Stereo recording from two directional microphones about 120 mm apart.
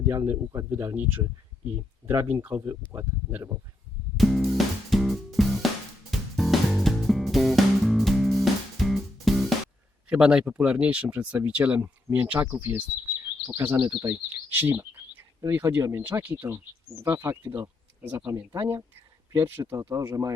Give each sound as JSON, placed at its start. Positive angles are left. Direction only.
{"t": 0.1, "sound": "speech", "side_deg": -25}
{"t": 2.0, "sound": "speech", "side_deg": -15}
{"t": 4.2, "sound": "music", "side_deg": 0}
{"t": 10.1, "sound": "speech", "side_deg": -5}
{"t": 18.0, "sound": "speech", "side_deg": -15}